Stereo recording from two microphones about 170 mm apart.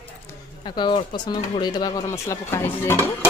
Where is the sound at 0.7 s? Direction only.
25° left (ahead or behind).